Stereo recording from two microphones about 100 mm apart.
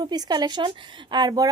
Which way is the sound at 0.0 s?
45° right (ahead or behind).